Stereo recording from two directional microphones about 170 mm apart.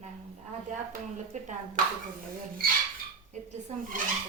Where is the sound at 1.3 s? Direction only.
45° right (ahead or behind).